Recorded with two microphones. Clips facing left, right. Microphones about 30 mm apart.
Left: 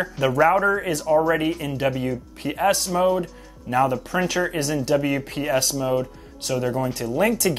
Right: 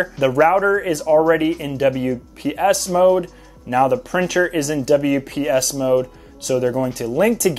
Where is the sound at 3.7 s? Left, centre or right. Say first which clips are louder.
Right 4 dB; centre.